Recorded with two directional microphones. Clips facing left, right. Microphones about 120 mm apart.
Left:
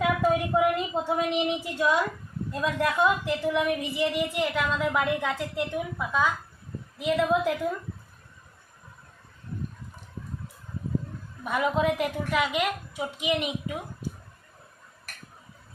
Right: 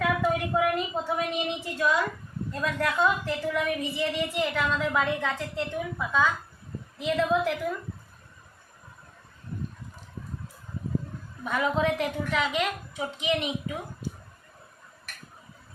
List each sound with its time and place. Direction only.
0.0 s a sound: 15° left (ahead or behind)
1.8 s a woman's voice: 20° left (ahead or behind)
11.4 s a woman's voice: 10° left (ahead or behind)